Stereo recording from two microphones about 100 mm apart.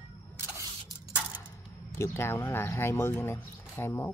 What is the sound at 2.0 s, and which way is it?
Speech, 25° left (ahead or behind).